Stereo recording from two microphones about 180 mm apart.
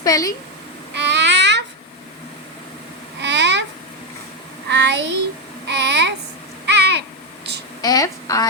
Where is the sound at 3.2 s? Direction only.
75° right (ahead or behind).